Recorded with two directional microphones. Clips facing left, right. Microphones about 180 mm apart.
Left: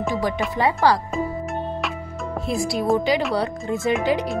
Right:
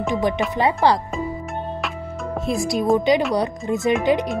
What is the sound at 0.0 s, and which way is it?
Speech, 20° right (ahead or behind).